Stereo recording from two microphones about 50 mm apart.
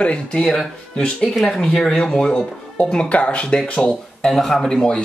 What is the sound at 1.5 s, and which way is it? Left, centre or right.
Speech, centre.